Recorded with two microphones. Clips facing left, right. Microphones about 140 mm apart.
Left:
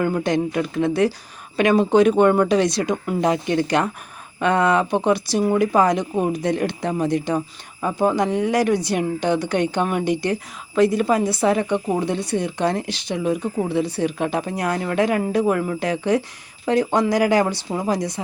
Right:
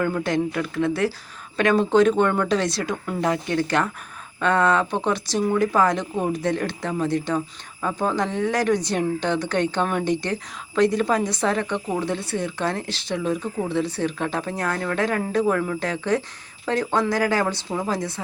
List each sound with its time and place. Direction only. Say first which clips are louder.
0.0 s speech: left 2 dB; 15° left (ahead or behind)